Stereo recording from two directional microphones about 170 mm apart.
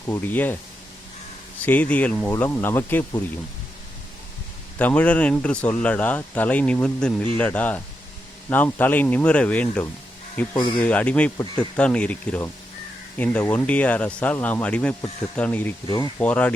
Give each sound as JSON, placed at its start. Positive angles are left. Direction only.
{"t": 0.0, "sound": "speech", "side_deg": 15}
{"t": 1.6, "sound": "speech", "side_deg": 10}
{"t": 4.8, "sound": "speech", "side_deg": 10}
{"t": 10.5, "sound": "speech", "side_deg": 25}
{"t": 10.8, "sound": "speech", "side_deg": 10}